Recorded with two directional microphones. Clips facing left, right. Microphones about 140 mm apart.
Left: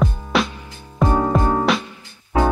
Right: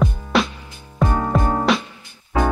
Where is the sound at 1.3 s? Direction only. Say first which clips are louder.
Left 1 dB; centre (ahead or behind).